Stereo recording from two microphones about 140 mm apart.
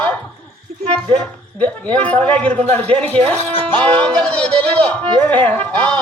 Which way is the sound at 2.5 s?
50° right (ahead or behind).